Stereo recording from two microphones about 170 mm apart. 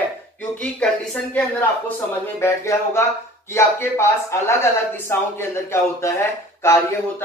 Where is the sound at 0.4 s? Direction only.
5° left (ahead or behind).